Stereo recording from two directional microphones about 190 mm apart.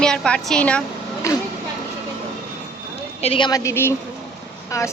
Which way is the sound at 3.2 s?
25° left (ahead or behind).